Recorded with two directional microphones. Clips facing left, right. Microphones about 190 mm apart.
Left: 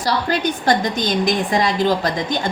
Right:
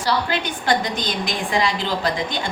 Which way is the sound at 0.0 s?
40° left (ahead or behind).